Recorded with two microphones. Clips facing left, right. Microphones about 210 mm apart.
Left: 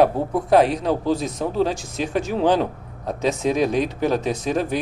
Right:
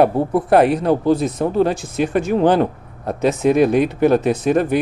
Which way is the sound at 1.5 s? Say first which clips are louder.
Right 4 dB; 55° right (ahead or behind).